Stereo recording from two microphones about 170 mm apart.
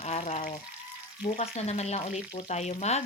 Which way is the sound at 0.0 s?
40° left (ahead or behind).